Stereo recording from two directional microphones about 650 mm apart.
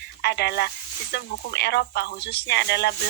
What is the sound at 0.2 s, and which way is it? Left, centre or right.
Speech, centre.